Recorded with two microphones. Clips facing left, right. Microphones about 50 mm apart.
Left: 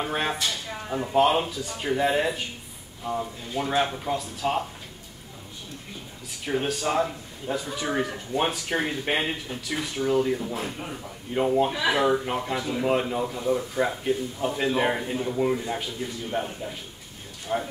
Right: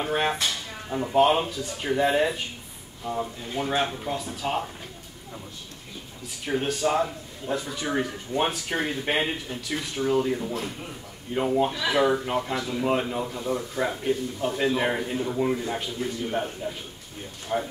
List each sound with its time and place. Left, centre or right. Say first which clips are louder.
0.0 s speech: right 2 dB; centre
0.7 s a sound: left 1 dB; centre
1.0 s speech: right 1 dB; centre
6.4 s speech: right 1 dB; centre
10.5 s speech: left 1 dB; centre
11.3 s speech: left 1 dB; centre
11.7 s speech: left 2 dB; centre
12.0 s speech: right 1 dB; centre
17.5 s speech: even; centre